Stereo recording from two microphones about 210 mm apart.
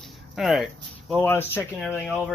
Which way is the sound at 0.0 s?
Centre (ahead or behind).